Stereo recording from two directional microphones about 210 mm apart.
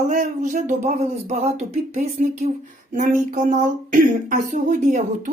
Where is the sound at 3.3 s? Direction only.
40° right (ahead or behind).